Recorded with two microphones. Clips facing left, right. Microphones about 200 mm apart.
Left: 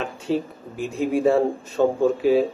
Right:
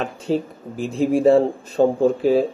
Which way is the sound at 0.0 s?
35° right (ahead or behind).